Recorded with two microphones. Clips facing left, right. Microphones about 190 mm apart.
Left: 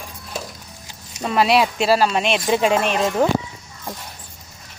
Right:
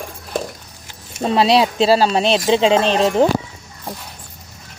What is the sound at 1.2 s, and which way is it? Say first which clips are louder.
Speech: right 3 dB; 30° right (ahead or behind).